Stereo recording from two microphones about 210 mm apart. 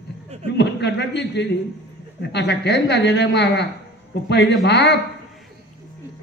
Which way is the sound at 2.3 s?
55° left (ahead or behind).